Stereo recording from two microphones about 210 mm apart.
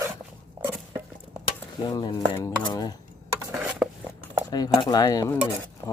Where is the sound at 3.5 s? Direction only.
5° right (ahead or behind).